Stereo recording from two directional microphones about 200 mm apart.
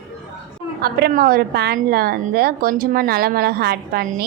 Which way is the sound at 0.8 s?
50° right (ahead or behind).